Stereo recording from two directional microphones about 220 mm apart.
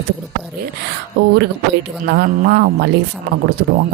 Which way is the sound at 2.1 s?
45° right (ahead or behind).